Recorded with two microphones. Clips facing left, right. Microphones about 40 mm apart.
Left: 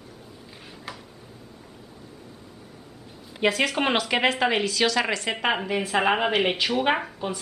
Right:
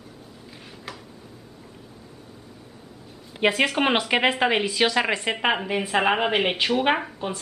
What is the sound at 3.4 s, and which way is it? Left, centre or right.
A woman's voice, centre.